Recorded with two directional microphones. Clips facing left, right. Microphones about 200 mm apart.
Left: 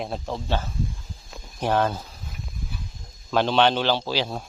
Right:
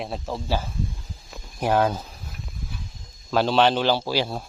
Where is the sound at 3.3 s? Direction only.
5° right (ahead or behind).